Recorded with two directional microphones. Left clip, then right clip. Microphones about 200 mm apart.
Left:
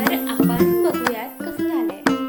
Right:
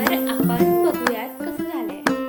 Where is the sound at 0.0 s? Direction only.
Centre (ahead or behind).